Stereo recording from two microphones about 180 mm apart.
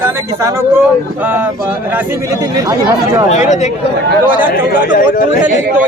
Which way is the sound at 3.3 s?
40° left (ahead or behind).